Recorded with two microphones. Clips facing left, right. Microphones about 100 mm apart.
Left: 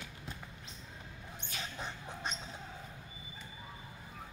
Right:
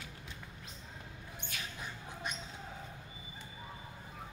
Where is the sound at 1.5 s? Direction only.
25° left (ahead or behind).